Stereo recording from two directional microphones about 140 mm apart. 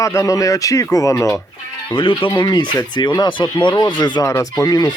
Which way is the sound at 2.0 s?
40° left (ahead or behind).